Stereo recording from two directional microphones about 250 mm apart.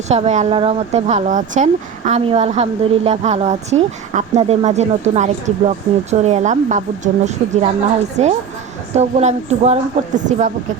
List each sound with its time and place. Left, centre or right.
0.1 s speech: right